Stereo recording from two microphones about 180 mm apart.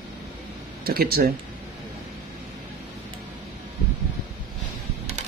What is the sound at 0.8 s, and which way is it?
Speech, 55° right (ahead or behind).